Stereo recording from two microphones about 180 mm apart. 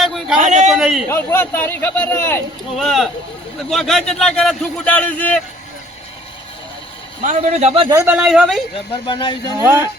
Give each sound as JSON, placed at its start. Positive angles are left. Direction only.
{"t": 0.0, "sound": "a sound", "side_deg": 0}
{"t": 0.3, "sound": "a sound", "side_deg": -40}
{"t": 0.7, "sound": "a sound", "side_deg": 0}
{"t": 1.1, "sound": "speech", "side_deg": 15}
{"t": 2.7, "sound": "speech", "side_deg": 0}
{"t": 7.2, "sound": "a man's voice", "side_deg": -45}
{"t": 7.9, "sound": "speech", "side_deg": -15}
{"t": 8.1, "sound": "speech", "side_deg": -5}
{"t": 9.0, "sound": "speech", "side_deg": 25}